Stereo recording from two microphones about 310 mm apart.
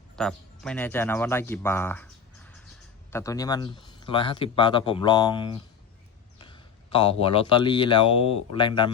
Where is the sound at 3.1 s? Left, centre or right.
Centre.